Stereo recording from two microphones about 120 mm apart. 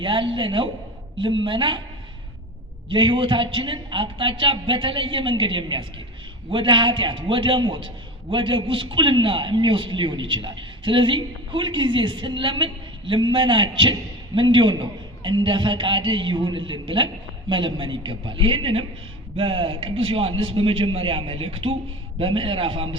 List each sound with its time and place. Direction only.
0.0 s a man's voice: 45° right (ahead or behind)
2.9 s a man's voice: 45° right (ahead or behind)